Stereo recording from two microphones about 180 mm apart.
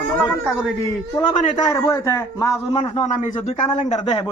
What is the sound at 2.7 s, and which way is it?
Speech, 35° left (ahead or behind).